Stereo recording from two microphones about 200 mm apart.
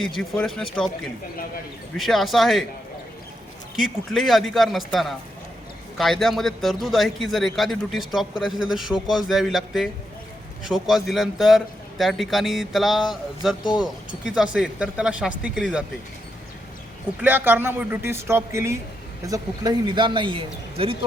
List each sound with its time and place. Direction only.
0.0 s a man's voice: centre (ahead or behind)
2.0 s a man's voice: centre (ahead or behind)
3.8 s a man's voice: centre (ahead or behind)
17.2 s speech: 10° right (ahead or behind); by 20.9 s 25° right (ahead or behind)